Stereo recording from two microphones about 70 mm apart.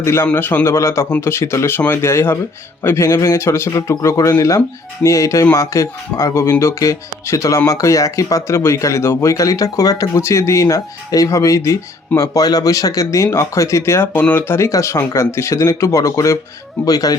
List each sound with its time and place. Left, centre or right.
0.0 s a man's voice: left
0.3 s a man's voice: left
14.2 s a man's voice: left
14.7 s speech: left